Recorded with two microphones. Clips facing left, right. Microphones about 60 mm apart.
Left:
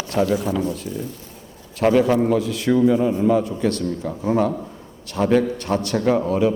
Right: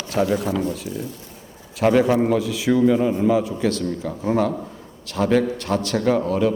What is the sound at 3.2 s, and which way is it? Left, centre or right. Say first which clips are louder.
A man's voice: left 1 dB; centre.